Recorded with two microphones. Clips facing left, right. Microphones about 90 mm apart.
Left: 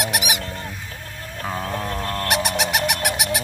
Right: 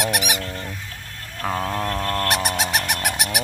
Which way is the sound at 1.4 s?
55° right (ahead or behind).